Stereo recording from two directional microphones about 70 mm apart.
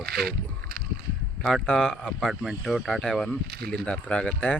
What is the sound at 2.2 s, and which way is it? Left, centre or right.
Speech, centre.